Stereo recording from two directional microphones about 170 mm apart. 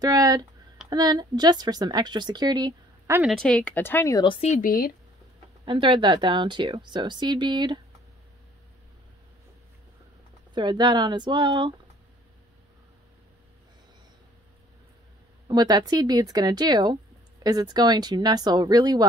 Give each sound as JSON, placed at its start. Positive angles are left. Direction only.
{"t": 0.0, "sound": "speech", "side_deg": -20}
{"t": 3.2, "sound": "speech", "side_deg": 0}
{"t": 4.2, "sound": "a woman's voice", "side_deg": 30}
{"t": 4.5, "sound": "speech", "side_deg": 55}
{"t": 5.7, "sound": "speech", "side_deg": -30}
{"t": 10.5, "sound": "speech", "side_deg": -25}
{"t": 15.4, "sound": "speech", "side_deg": -25}